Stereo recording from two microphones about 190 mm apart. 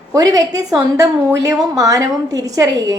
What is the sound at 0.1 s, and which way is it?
A woman's voice, 20° right (ahead or behind).